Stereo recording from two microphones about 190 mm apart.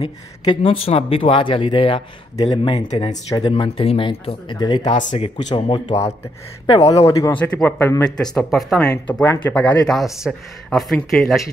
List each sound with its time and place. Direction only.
0.0 s speech: 30° left (ahead or behind); by 11.4 s centre (ahead or behind)